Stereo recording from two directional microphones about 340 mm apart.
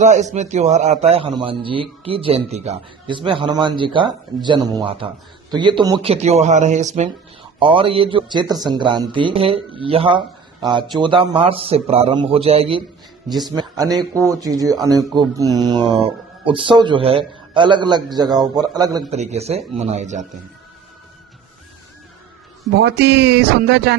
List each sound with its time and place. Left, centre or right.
0.0 s speech: right
22.7 s speech: right